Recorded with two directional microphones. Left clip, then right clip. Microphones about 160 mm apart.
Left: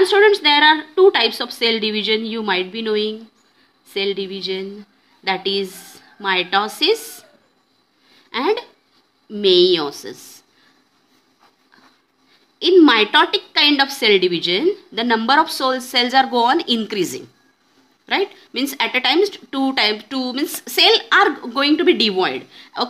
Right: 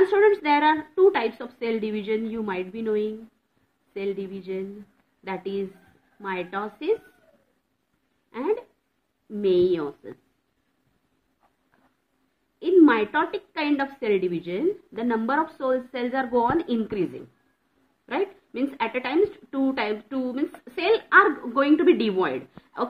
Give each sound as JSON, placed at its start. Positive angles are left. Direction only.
{"t": 0.1, "sound": "a woman's voice", "side_deg": 15}
{"t": 8.3, "sound": "a woman's voice", "side_deg": 30}
{"t": 12.5, "sound": "a woman's voice", "side_deg": 30}